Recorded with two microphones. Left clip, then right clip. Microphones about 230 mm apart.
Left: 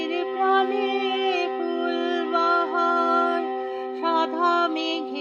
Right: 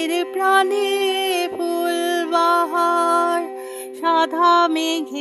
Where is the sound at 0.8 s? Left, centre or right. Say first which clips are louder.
Right 4 dB; right.